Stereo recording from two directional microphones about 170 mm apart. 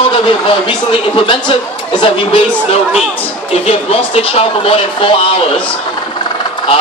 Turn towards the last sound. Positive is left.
turn(degrees=35)  # may be behind; listen again after turning